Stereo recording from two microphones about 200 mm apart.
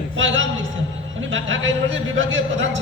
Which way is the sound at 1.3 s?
70° right (ahead or behind).